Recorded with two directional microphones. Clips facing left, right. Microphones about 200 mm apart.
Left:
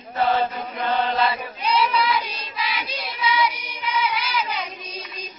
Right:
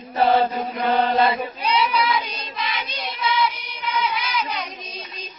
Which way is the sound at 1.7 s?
Centre (ahead or behind).